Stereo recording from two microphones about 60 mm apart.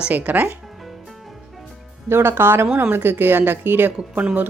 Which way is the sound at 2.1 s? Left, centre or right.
Right.